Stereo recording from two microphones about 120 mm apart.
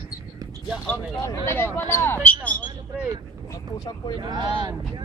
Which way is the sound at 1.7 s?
20° left (ahead or behind).